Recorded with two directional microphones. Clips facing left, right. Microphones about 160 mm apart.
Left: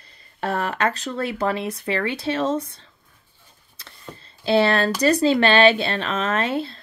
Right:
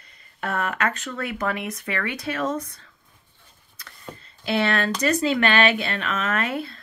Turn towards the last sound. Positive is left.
turn(degrees=30)  # may be behind; listen again after turning